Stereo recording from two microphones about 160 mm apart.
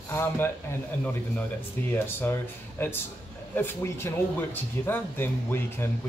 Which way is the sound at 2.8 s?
15° left (ahead or behind).